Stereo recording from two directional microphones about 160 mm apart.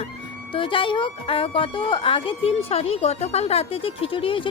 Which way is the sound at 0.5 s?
30° left (ahead or behind).